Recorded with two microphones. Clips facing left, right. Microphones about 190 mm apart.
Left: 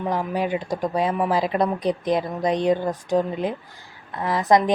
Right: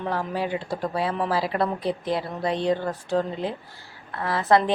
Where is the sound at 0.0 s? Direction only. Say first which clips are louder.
Left 3 dB; 15° left (ahead or behind).